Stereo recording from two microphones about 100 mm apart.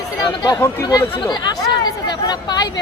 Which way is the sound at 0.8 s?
40° left (ahead or behind).